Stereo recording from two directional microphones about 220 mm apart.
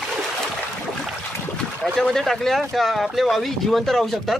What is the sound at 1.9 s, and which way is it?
Speech, centre (ahead or behind).